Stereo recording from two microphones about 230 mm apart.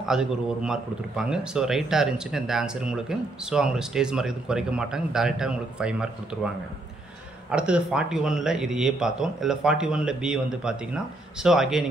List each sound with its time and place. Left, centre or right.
0.1 s a man's voice: centre
7.5 s a man's voice: centre